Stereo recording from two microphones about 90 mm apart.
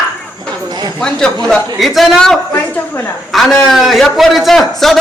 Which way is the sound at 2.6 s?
20° left (ahead or behind).